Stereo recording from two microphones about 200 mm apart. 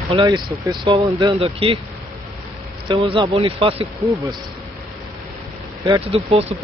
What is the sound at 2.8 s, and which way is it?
Speech, 25° right (ahead or behind).